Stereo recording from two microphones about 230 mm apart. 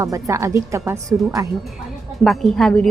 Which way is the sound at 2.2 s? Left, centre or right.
Centre.